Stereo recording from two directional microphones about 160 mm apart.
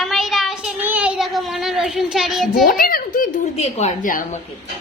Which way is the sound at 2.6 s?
65° left (ahead or behind).